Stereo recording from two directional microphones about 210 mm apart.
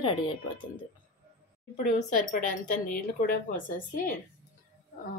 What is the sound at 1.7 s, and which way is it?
Speech, 40° left (ahead or behind).